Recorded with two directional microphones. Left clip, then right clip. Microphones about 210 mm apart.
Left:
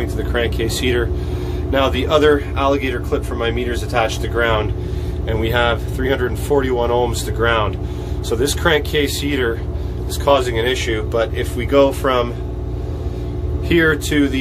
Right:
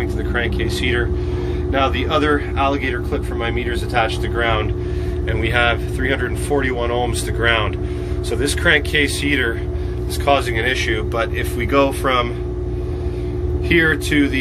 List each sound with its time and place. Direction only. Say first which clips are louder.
0.0 s speech: left 1 dB; 15° left (ahead or behind)
13.7 s speech: left 1 dB; 15° left (ahead or behind)